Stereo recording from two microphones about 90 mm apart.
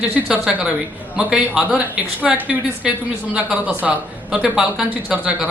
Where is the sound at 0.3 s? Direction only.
5° right (ahead or behind).